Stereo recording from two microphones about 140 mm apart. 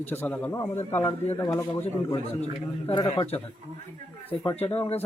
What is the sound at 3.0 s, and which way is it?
Speech, 30° left (ahead or behind).